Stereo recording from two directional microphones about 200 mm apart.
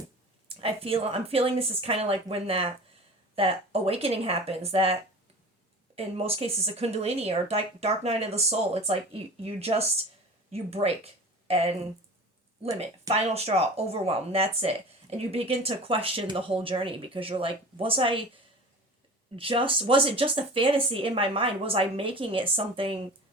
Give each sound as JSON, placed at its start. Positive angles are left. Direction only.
{"t": 0.4, "sound": "speech", "side_deg": -30}
{"t": 6.0, "sound": "speech", "side_deg": -30}
{"t": 12.8, "sound": "speech", "side_deg": -30}
{"t": 19.4, "sound": "speech", "side_deg": -25}